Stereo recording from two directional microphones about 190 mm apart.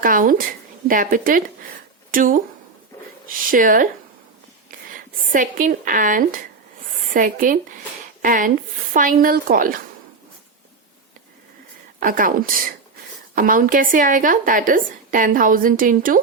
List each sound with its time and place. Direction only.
0.0 s speech: 45° right (ahead or behind)
11.9 s speech: 45° right (ahead or behind)